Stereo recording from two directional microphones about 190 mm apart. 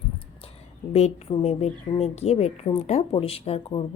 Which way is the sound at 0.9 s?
35° left (ahead or behind).